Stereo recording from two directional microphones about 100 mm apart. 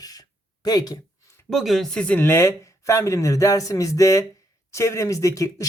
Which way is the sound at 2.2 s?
25° left (ahead or behind).